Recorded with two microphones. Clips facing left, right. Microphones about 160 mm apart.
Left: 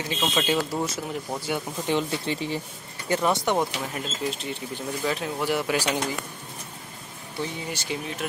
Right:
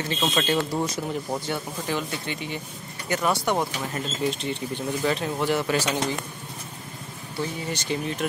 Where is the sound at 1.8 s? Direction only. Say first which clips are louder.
Left 3 dB; 25° left (ahead or behind).